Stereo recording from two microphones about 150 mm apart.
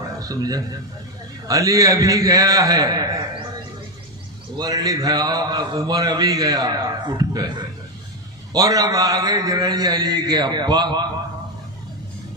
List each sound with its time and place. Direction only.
0.2 s a man's voice: 25° right (ahead or behind)
4.5 s a man's voice: 25° right (ahead or behind)